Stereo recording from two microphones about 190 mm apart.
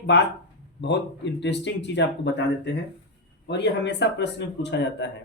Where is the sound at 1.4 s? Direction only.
65° left (ahead or behind).